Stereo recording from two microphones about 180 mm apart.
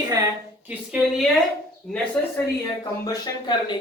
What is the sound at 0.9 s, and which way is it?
A woman's voice, centre (ahead or behind).